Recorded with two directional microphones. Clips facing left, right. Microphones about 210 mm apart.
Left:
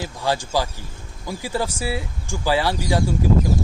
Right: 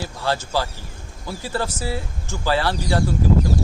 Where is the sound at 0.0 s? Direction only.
15° left (ahead or behind).